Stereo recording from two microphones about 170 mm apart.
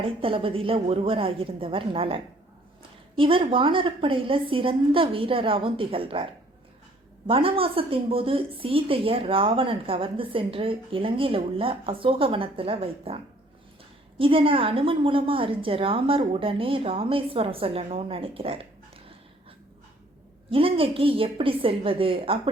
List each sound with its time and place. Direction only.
0.0 s a woman's voice: 30° right (ahead or behind)
7.3 s a woman's voice: 30° right (ahead or behind)
14.2 s a woman's voice: 30° right (ahead or behind)
20.5 s a woman's voice: 30° right (ahead or behind)